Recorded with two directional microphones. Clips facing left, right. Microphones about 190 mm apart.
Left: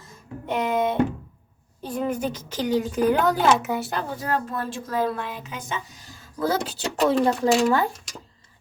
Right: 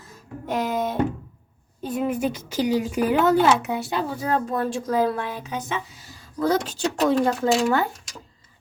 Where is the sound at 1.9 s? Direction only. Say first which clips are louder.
Right 2 dB; 5° right (ahead or behind).